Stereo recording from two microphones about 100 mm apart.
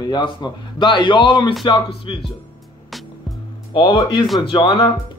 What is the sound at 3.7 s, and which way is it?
Speech, 55° left (ahead or behind).